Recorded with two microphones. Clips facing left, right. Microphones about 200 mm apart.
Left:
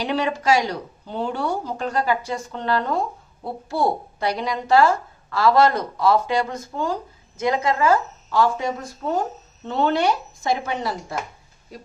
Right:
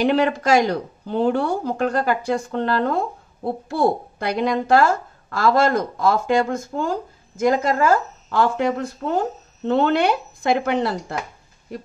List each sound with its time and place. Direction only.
0.0 s a woman's voice: 55° right (ahead or behind)
4.2 s a woman's voice: 55° right (ahead or behind)